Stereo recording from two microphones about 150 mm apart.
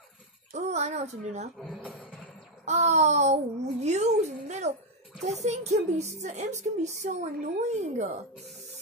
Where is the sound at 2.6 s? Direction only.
50° right (ahead or behind).